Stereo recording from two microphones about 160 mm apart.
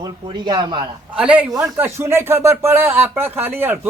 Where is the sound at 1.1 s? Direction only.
5° right (ahead or behind).